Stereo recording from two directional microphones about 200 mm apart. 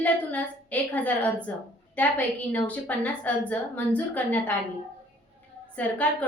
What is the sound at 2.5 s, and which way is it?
A woman's voice, 5° left (ahead or behind).